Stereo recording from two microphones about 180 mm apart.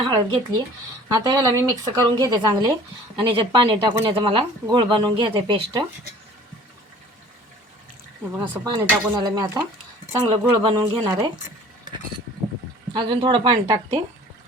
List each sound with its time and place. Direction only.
0.0 s speech: 25° right (ahead or behind)
8.3 s speech: 20° right (ahead or behind)
12.9 s speech: 25° right (ahead or behind)